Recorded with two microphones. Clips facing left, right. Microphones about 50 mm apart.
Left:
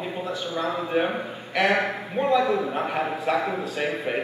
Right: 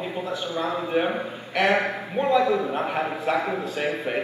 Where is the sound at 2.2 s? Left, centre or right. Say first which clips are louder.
Right 1 dB; right.